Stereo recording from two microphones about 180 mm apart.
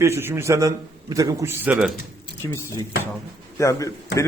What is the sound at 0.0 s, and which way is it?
A man's voice, 15° right (ahead or behind).